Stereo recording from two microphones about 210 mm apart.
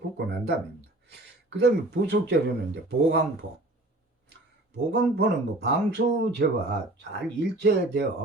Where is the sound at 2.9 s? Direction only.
55° right (ahead or behind).